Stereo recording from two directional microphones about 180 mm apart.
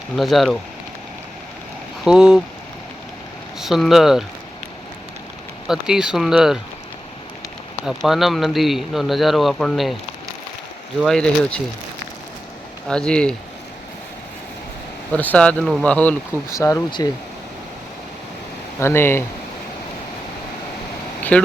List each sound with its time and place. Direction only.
0.2 s speech: centre (ahead or behind)
2.0 s speech: 5° right (ahead or behind)
3.6 s speech: centre (ahead or behind)
5.6 s speech: 5° right (ahead or behind)
7.9 s speech: centre (ahead or behind)
11.0 s speech: 5° left (ahead or behind)
12.9 s speech: 5° left (ahead or behind)
15.1 s speech: 10° left (ahead or behind)
16.5 s speech: 20° left (ahead or behind)
18.8 s speech: 15° left (ahead or behind)
21.3 s speech: 5° left (ahead or behind)